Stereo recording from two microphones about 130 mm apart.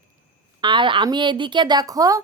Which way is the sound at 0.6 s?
40° right (ahead or behind).